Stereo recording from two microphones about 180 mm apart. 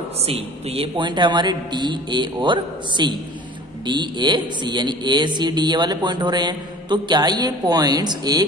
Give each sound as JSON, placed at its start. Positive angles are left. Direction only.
{"t": 0.2, "sound": "speech", "side_deg": -35}